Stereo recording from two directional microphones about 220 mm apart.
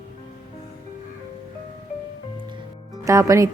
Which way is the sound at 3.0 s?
15° right (ahead or behind).